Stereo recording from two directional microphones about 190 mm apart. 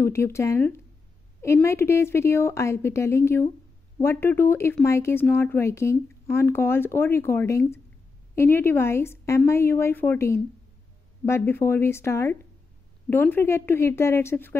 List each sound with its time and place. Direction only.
0.0 s speech: 15° left (ahead or behind)